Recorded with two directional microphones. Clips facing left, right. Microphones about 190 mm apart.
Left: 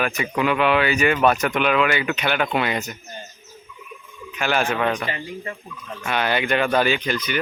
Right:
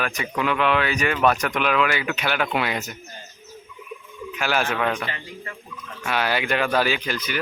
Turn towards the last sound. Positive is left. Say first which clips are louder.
# left 3 dB
turn(degrees=-5)  # may be behind; listen again after turning